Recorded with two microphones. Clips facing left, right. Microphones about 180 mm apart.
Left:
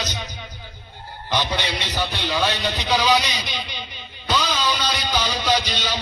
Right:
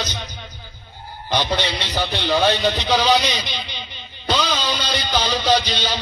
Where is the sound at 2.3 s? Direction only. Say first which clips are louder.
Right 7 dB; 40° right (ahead or behind).